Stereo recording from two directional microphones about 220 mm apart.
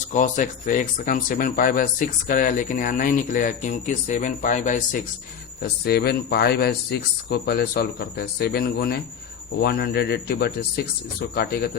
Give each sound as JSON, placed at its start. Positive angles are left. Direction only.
{"t": 0.1, "sound": "speech", "side_deg": 35}
{"t": 5.8, "sound": "speech", "side_deg": 45}